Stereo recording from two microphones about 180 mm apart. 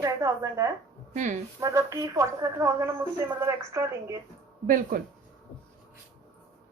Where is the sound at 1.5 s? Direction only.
15° right (ahead or behind).